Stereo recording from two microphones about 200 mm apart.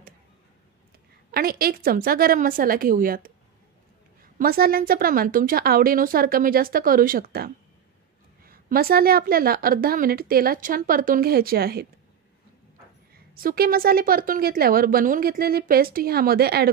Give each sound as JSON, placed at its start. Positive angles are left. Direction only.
{"t": 1.3, "sound": "speech", "side_deg": -50}
{"t": 4.4, "sound": "speech", "side_deg": -50}
{"t": 13.3, "sound": "speech", "side_deg": -50}